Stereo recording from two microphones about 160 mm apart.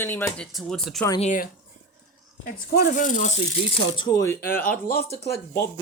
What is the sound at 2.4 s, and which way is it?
Speech, 70° left (ahead or behind).